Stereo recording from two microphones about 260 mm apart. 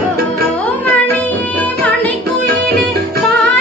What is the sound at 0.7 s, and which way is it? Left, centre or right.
Music, centre.